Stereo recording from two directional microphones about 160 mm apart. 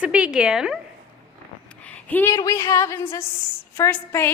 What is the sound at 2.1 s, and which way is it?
A woman's voice, 15° left (ahead or behind).